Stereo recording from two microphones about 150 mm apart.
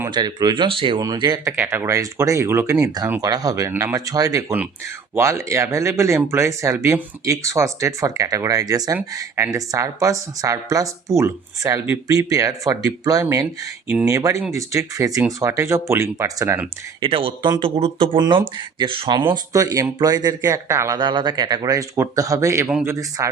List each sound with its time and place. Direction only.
0.1 s speech: 25° right (ahead or behind)
1.5 s speech: 15° right (ahead or behind)
17.0 s speech: 35° right (ahead or behind); by 23.3 s 20° right (ahead or behind)